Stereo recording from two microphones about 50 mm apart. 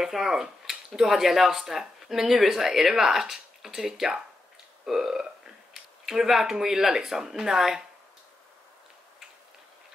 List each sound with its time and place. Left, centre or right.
0.0 s speech: centre